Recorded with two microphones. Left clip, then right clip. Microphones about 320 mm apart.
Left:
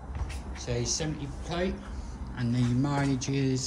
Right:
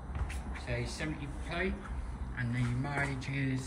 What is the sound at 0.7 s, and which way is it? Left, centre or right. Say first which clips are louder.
Speech: left 7 dB; centre.